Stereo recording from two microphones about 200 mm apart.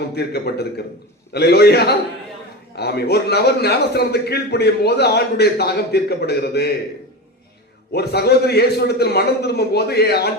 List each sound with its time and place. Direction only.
0.1 s a man's voice: 55° left (ahead or behind)
7.9 s a man's voice: 55° left (ahead or behind)